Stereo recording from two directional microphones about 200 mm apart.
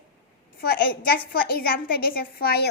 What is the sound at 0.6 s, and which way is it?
A woman's voice, 50° left (ahead or behind).